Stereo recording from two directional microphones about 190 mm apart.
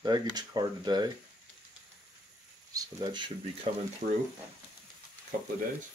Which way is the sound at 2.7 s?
20° right (ahead or behind).